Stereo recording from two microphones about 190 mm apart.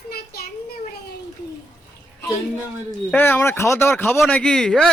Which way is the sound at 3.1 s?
10° left (ahead or behind).